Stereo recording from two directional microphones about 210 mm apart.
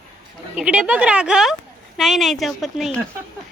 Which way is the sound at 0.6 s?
5° right (ahead or behind).